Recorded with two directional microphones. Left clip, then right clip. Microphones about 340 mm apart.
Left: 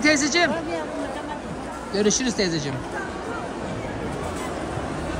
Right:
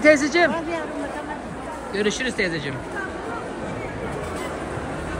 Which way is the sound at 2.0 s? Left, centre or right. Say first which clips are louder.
Even; centre.